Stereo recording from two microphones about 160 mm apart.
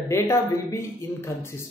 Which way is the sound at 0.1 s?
15° left (ahead or behind).